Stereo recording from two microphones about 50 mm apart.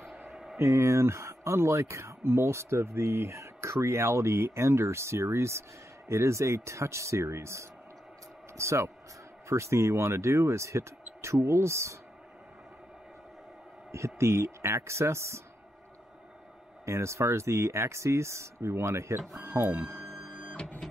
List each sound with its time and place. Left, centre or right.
0.3 s a sound: centre
0.6 s speech: right
2.2 s speech: right
13.9 s speech: right
16.8 s speech: right